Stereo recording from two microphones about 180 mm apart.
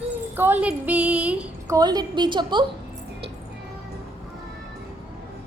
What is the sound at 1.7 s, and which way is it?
Speech, 20° right (ahead or behind).